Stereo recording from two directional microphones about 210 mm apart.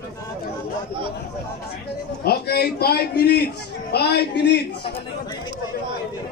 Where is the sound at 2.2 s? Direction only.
50° left (ahead or behind).